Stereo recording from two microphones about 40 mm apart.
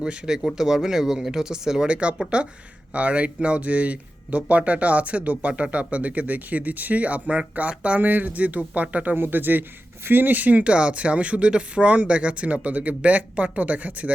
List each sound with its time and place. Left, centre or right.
0.0 s speech: right
1.9 s speech: right
8.0 s speech: right
9.1 s speech: right